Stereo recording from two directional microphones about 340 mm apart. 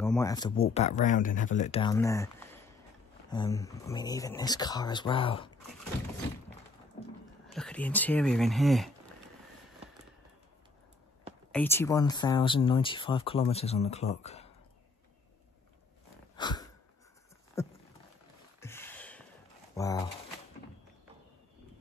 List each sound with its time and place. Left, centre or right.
0.0 s speech: centre
7.5 s speech: centre
11.5 s speech: centre
16.3 s a sound: centre
17.6 s patter: centre
18.6 s a sound: centre
19.7 s speech: centre